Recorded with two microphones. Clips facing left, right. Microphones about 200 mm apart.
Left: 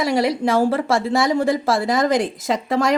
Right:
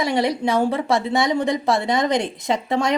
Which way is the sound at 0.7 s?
20° right (ahead or behind).